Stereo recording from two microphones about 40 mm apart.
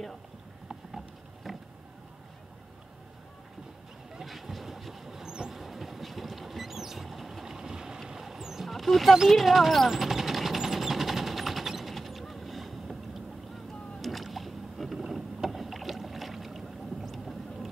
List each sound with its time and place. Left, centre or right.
0.7 s patter: centre
4.3 s train: centre
5.5 s vehicle: centre
7.4 s vehicle: centre
8.1 s music: centre
8.6 s a sound: centre
14.0 s rowboat: centre